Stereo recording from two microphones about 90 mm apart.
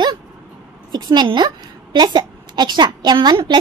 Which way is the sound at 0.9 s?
55° right (ahead or behind).